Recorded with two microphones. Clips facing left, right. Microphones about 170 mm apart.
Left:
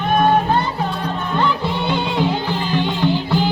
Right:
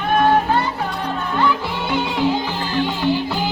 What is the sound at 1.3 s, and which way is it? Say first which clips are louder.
Music: left 1 dB; 20° left (ahead or behind).